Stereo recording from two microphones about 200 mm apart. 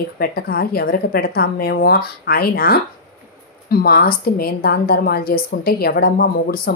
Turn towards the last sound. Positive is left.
turn(degrees=50)  # may be behind; listen again after turning